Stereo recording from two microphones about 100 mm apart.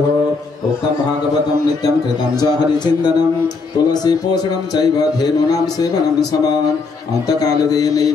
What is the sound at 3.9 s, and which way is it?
Speech, 40° left (ahead or behind).